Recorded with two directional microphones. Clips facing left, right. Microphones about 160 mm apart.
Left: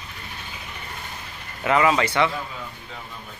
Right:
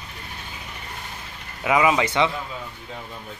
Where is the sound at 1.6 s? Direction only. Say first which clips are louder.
Even; 15° right (ahead or behind).